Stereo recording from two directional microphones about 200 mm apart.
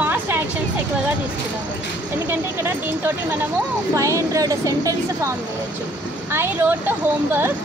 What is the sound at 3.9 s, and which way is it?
Speech, 15° right (ahead or behind).